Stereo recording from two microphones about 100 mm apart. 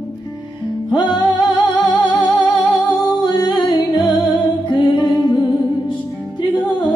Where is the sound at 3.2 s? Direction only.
45° left (ahead or behind).